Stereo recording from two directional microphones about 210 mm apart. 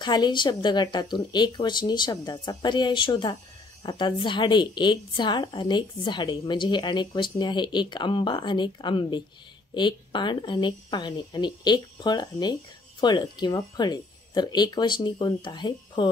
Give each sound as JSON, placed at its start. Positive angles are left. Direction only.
{"t": 0.0, "sound": "a woman's voice", "side_deg": 20}